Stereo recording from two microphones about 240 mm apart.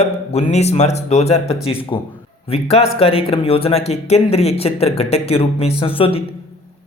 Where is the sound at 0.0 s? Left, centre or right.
Left.